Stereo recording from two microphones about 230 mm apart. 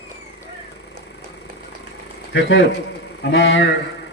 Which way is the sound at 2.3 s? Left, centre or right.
Left.